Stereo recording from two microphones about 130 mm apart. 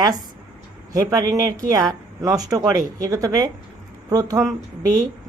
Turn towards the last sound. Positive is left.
turn(degrees=-25)  # may be behind; listen again after turning